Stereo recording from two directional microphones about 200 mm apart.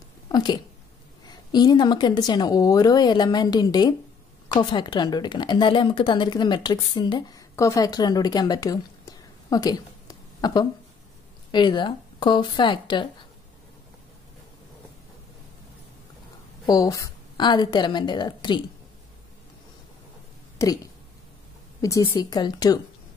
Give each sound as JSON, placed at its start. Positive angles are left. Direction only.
{"t": 0.3, "sound": "a sound", "side_deg": 20}
{"t": 1.2, "sound": "a woman's voice", "side_deg": 20}
{"t": 16.6, "sound": "a woman's voice", "side_deg": 20}
{"t": 20.5, "sound": "speech", "side_deg": 15}
{"t": 21.8, "sound": "a woman's voice", "side_deg": 20}